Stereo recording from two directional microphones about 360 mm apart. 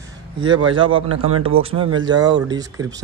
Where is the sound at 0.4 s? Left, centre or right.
Centre.